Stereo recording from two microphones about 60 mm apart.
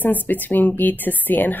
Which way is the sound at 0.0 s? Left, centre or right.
Left.